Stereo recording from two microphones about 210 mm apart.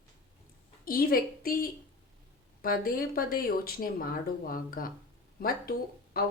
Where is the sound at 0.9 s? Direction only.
45° left (ahead or behind).